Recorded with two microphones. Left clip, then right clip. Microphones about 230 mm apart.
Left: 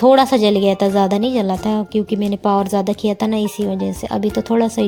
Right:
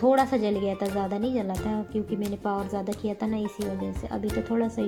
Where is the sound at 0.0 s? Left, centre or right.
Left.